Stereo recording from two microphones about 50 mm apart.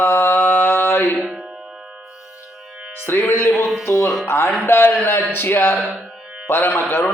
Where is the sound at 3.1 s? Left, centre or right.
Left.